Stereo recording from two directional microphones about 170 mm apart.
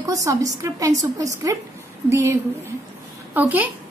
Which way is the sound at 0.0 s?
20° right (ahead or behind).